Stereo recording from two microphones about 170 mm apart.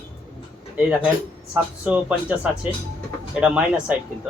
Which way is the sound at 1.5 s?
5° right (ahead or behind).